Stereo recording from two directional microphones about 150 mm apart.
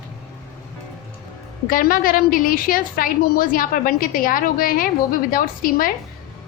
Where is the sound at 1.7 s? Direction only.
70° left (ahead or behind).